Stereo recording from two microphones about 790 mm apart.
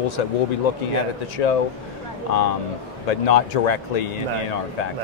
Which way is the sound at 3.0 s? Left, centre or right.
Left.